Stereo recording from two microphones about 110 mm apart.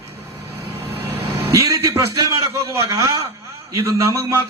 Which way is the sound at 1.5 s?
30° right (ahead or behind).